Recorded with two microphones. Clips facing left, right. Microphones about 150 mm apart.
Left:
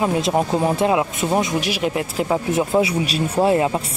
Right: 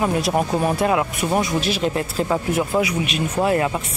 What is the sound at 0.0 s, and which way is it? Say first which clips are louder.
Speech: left 1 dB; 20° left (ahead or behind).